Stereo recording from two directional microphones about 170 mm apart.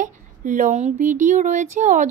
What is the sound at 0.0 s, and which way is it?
Speech, 50° right (ahead or behind).